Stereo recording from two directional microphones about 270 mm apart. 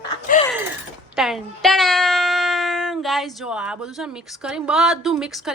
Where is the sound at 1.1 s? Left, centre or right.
Centre.